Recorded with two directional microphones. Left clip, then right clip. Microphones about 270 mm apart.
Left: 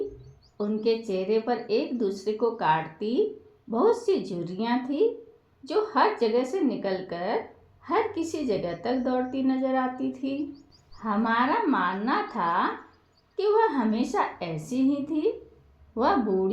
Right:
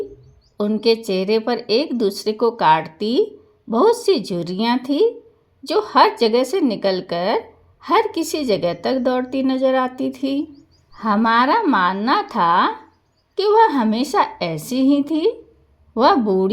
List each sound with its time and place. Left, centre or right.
0.5 s speech: right